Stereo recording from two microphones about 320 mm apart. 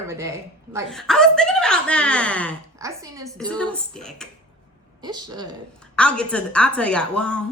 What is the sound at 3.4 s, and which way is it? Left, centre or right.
Speech, centre.